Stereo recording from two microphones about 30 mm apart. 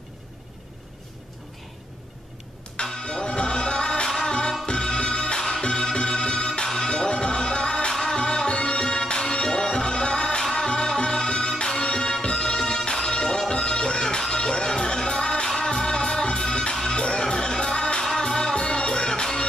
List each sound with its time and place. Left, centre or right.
2.8 s music: left
7.9 s music: centre
8.2 s music: left